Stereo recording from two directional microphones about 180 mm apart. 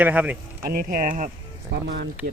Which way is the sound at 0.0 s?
10° right (ahead or behind).